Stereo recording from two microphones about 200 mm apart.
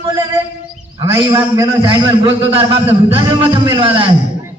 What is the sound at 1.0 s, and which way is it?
A man's voice, 25° right (ahead or behind).